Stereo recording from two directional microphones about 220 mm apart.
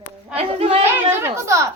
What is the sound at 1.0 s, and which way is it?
Speech, 10° right (ahead or behind).